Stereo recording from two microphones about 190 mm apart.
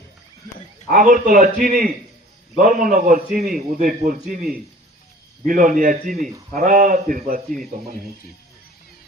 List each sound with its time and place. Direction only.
0.9 s a man's voice: 50° right (ahead or behind)
5.5 s a man's voice: 45° right (ahead or behind)